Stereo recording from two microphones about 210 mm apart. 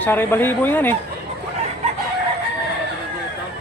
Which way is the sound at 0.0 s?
10° left (ahead or behind).